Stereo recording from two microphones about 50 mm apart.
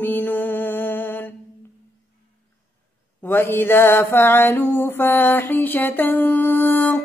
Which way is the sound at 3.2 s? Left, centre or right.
Left.